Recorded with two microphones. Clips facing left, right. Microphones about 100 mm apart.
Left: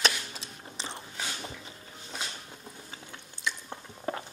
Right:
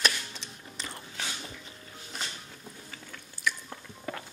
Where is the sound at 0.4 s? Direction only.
30° left (ahead or behind).